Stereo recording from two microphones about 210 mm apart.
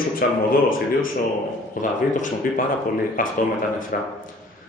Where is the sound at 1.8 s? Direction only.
35° left (ahead or behind).